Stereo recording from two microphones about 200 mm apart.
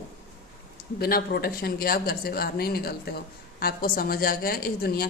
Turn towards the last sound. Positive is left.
turn(degrees=50)  # may be behind; listen again after turning